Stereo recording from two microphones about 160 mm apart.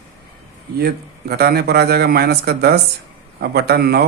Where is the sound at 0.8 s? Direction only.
80° right.